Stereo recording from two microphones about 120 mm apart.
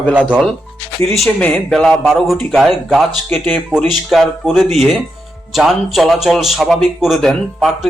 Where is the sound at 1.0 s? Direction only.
Centre (ahead or behind).